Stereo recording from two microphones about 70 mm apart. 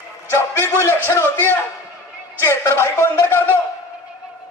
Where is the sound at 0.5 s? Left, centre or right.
Right.